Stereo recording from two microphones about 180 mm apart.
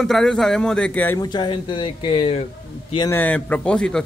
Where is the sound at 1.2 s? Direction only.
25° left (ahead or behind).